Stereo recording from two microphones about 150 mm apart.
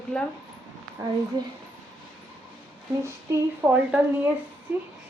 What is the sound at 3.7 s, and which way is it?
A woman's voice, 10° right (ahead or behind).